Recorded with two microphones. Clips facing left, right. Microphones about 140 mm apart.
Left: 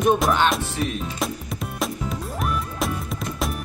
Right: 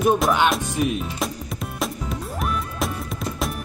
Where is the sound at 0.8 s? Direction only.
15° right (ahead or behind).